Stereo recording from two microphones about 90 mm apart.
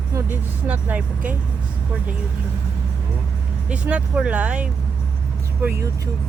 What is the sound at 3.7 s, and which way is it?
Speech, 15° right (ahead or behind).